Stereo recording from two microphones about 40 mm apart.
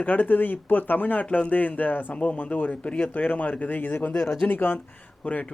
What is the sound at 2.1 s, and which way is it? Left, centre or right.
Speech, left.